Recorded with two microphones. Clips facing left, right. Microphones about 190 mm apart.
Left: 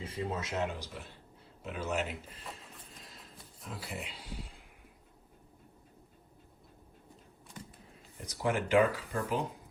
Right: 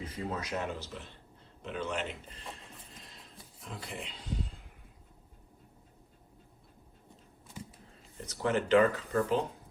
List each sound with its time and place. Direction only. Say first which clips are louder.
0.0 s speech: left 1 dB; 25° left (ahead or behind)
1.6 s a sound: left 1 dB; 5° left (ahead or behind)
8.2 s speech: right 2 dB; 10° left (ahead or behind)